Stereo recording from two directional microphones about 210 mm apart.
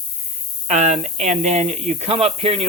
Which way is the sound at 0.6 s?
35° right (ahead or behind).